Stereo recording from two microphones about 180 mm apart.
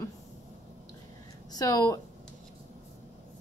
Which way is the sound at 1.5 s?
20° left (ahead or behind).